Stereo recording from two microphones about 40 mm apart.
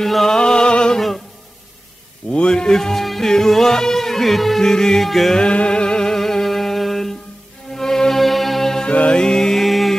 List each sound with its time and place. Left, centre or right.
0.0 s music: centre
0.4 s music: left
0.9 s music: centre
2.3 s speech: left; by 3.3 s centre
3.3 s music: centre
4.6 s speech: centre
5.3 s music: left
6.0 s music: centre
8.8 s music: left
9.2 s mantra: centre